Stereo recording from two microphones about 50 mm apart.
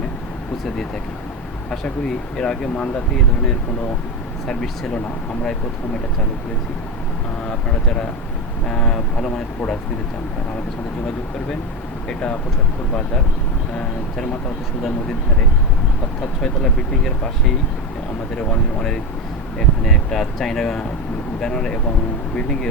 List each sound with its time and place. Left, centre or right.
2.4 s speech: centre
4.4 s speech: centre
8.6 s speech: centre
12.0 s speech: left
16.4 s speech: centre
19.5 s speech: centre